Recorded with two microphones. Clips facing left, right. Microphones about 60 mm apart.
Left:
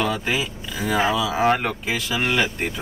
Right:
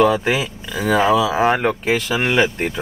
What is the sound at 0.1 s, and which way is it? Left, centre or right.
Speech, right.